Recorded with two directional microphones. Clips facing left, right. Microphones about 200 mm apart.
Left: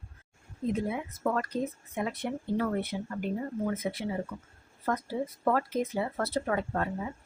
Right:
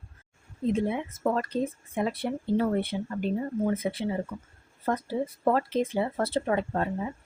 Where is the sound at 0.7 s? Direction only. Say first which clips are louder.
Right 4 dB; 25° right (ahead or behind).